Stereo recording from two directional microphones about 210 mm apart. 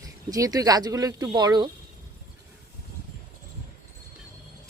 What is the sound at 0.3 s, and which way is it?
Speech, 15° right (ahead or behind).